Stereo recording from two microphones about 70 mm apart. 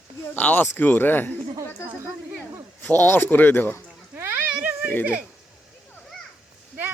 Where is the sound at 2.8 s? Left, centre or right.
Left.